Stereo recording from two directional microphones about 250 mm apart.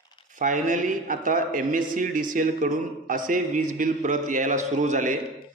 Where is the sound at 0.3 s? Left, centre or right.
Right.